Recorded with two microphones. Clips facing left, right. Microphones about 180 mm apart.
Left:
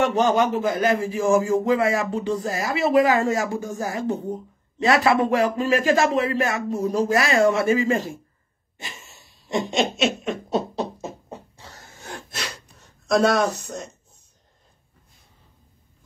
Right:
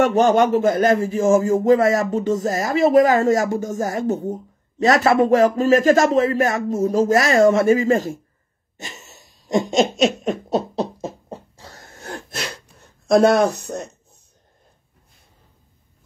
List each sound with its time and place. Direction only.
0.7 s speech: 45° right (ahead or behind)
8.7 s laughter: 45° right (ahead or behind)
11.8 s wheeze: 55° right (ahead or behind)